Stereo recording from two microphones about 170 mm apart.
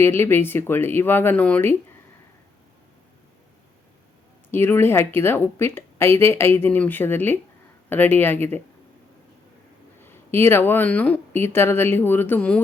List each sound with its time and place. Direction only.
0.0 s a woman's voice: 15° left (ahead or behind)
4.5 s a woman's voice: 15° left (ahead or behind)
10.0 s a woman's voice: 15° left (ahead or behind)